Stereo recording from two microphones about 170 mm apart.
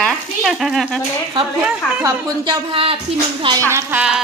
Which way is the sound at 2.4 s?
30° right (ahead or behind).